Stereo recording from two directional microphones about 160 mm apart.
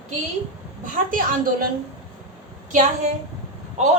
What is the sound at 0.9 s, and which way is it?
Speech, 60° right (ahead or behind).